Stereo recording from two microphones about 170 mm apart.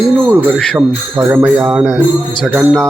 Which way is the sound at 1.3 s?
5° right (ahead or behind).